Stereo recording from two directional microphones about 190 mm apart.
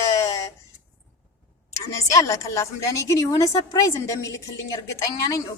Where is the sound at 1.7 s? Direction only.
15° left (ahead or behind).